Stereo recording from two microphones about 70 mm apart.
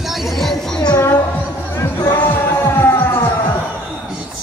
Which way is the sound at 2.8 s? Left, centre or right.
Left.